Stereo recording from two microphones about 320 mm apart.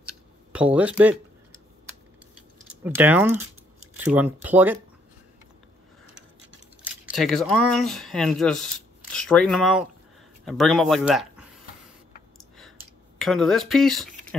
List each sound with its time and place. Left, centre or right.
0.0 s a sound: centre
2.8 s speech: centre
6.8 s speech: centre
13.2 s speech: centre